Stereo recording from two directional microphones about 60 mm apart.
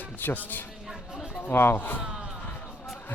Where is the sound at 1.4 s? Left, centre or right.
Left.